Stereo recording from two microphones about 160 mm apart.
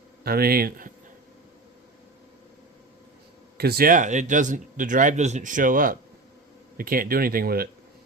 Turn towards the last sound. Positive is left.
turn(degrees=-70)  # may be behind; listen again after turning